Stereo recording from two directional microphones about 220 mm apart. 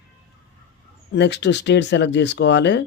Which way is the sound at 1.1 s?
50° left (ahead or behind).